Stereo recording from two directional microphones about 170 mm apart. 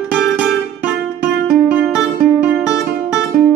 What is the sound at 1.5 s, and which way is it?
Music, 5° right (ahead or behind).